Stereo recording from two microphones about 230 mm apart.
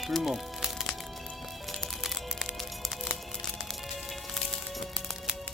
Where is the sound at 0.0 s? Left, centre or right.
Centre.